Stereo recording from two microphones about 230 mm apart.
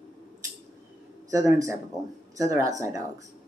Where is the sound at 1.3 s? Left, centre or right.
Centre.